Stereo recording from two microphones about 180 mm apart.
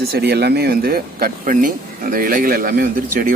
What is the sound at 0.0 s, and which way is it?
Speech, 65° right (ahead or behind).